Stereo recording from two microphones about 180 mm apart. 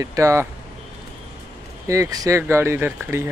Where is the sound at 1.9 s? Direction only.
20° right (ahead or behind).